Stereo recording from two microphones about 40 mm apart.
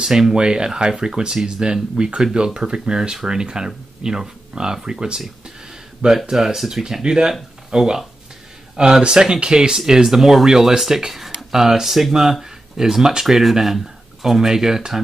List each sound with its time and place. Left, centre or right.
0.0 s speech: centre